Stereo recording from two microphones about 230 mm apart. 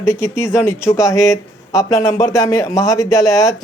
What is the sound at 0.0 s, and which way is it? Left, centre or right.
Speech, centre.